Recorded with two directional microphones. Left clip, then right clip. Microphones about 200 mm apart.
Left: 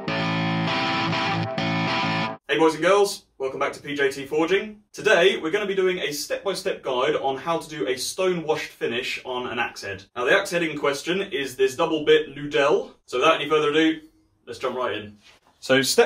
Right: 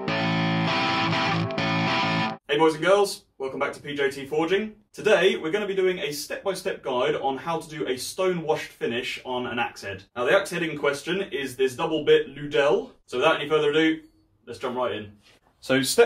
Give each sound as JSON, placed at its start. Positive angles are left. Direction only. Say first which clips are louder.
{"t": 0.0, "sound": "music", "louder": "even", "side_deg": 0}
{"t": 5.0, "sound": "speech", "louder": "left 2 dB", "side_deg": 5}
{"t": 10.1, "sound": "speech", "louder": "left 1 dB", "side_deg": 5}
{"t": 15.6, "sound": "speech", "louder": "left 4 dB", "side_deg": 30}